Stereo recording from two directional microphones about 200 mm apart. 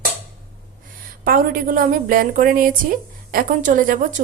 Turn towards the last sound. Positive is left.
turn(degrees=-40)  # may be behind; listen again after turning